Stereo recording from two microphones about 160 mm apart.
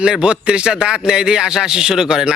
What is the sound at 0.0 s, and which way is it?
A man's voice, 5° right (ahead or behind).